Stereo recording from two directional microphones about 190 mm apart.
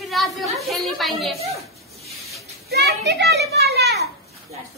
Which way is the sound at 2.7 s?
60° right (ahead or behind).